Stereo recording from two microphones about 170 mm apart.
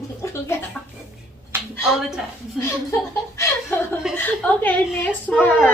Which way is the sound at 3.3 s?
15° left (ahead or behind).